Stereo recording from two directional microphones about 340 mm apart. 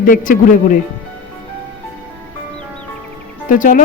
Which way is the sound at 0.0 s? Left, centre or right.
Left.